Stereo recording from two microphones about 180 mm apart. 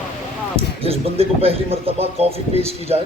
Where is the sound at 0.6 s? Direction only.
35° right (ahead or behind).